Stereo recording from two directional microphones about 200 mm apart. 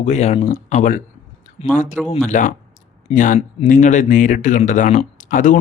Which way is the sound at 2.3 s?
40° left (ahead or behind).